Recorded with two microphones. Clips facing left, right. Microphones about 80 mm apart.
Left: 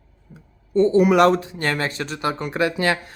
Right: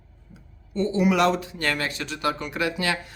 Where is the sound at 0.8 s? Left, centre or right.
Left.